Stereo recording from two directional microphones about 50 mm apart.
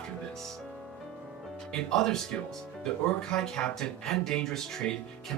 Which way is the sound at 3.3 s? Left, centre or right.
Centre.